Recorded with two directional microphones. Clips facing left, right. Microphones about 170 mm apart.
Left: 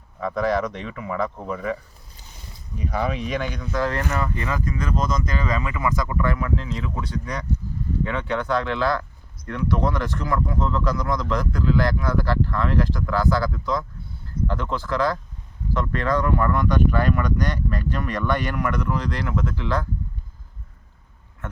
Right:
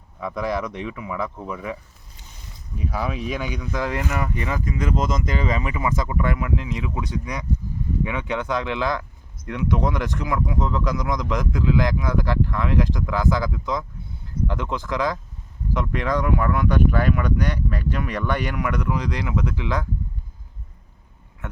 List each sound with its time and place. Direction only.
0.2 s speech: 10° right (ahead or behind)